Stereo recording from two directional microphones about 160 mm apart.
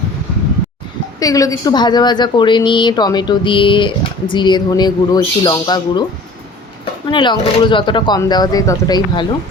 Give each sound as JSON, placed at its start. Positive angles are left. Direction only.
{"t": 1.2, "sound": "a woman's voice", "side_deg": 20}
{"t": 7.1, "sound": "a woman's voice", "side_deg": 30}